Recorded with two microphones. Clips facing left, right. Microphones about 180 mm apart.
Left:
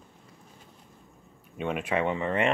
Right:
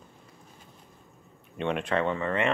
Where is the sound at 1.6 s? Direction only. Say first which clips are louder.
Right 1 dB; 5° left (ahead or behind).